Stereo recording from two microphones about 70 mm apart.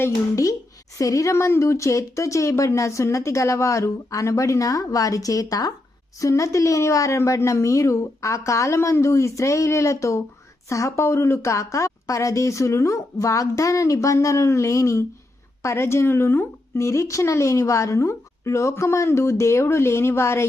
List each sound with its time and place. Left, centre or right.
0.9 s speech: left
6.1 s a woman's voice: left
16.7 s speech: left